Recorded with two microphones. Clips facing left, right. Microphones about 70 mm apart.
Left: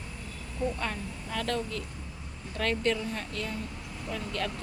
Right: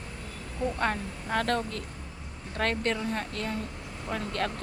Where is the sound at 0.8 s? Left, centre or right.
Right.